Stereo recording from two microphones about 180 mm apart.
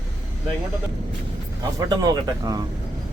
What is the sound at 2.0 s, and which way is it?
Speech, 20° right (ahead or behind).